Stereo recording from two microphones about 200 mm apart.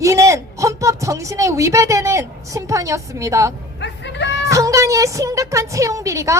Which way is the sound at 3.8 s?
65° left (ahead or behind).